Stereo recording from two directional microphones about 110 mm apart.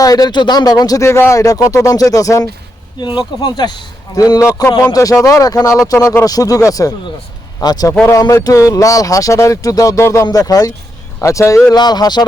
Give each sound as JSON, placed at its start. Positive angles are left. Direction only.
{"t": 0.0, "sound": "speech", "side_deg": 35}
{"t": 3.0, "sound": "speech", "side_deg": 45}
{"t": 11.8, "sound": "speech", "side_deg": 40}